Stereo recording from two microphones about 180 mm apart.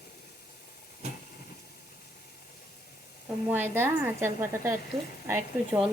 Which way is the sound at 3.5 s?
10° right (ahead or behind).